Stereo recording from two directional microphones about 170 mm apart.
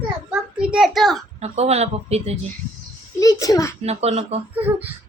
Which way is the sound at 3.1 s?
20° left (ahead or behind).